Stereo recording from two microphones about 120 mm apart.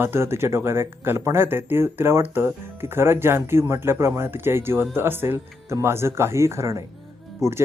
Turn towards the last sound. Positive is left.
turn(degrees=-25)  # may be behind; listen again after turning